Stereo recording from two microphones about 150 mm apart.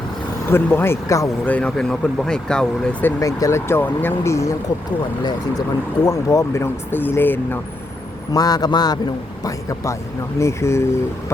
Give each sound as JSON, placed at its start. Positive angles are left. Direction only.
{"t": 0.5, "sound": "speech", "side_deg": 15}
{"t": 1.5, "sound": "speech", "side_deg": 5}
{"t": 3.2, "sound": "speech", "side_deg": 20}
{"t": 8.3, "sound": "speech", "side_deg": 25}